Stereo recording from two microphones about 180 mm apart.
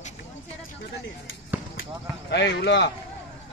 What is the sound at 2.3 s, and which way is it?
Speech, 70° left (ahead or behind).